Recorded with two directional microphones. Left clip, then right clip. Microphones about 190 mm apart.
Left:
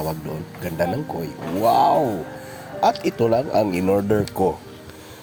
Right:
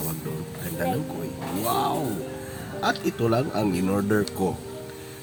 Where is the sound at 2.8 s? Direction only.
30° left (ahead or behind).